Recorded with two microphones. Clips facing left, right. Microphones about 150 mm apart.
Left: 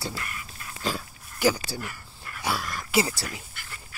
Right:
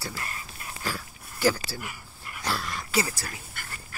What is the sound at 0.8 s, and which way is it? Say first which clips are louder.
Speech: left 4 dB; 20° left (ahead or behind).